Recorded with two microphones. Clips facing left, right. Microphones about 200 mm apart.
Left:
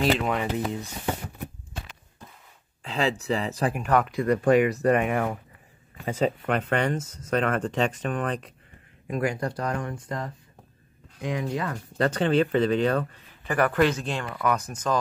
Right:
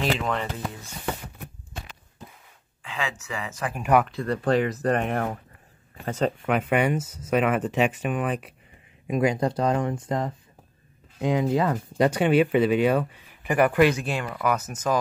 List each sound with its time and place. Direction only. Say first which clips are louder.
0.0 s speech: left 2 dB; 10° left (ahead or behind)
2.8 s speech: left 6 dB; 35° left (ahead or behind)
4.1 s speech: left 3 dB; 15° left (ahead or behind)
6.4 s speech: right 2 dB; 5° right (ahead or behind)
9.0 s speech: right 4 dB; 20° right (ahead or behind)
12.0 s speech: right 2 dB; 10° right (ahead or behind)